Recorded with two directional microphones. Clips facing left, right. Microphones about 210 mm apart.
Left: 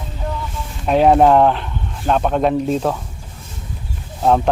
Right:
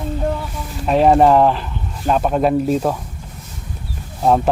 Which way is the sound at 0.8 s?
Centre (ahead or behind).